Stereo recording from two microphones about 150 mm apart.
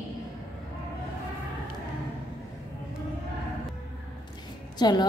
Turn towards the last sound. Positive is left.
turn(degrees=30)  # may be behind; listen again after turning